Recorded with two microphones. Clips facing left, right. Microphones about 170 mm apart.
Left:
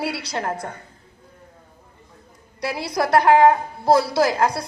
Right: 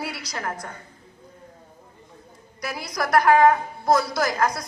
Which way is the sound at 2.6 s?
30° left (ahead or behind).